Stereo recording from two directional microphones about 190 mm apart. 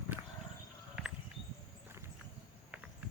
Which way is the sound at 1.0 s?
5° right (ahead or behind).